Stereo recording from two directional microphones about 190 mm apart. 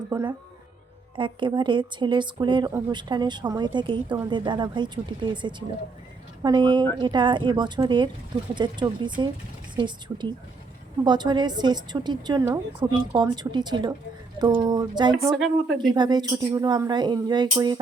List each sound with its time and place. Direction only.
0.1 s a woman's voice: 15° right (ahead or behind)
15.3 s speech: centre (ahead or behind)
15.8 s a woman's voice: 25° right (ahead or behind)